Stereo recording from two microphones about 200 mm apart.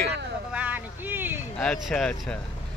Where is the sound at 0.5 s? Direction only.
10° right (ahead or behind).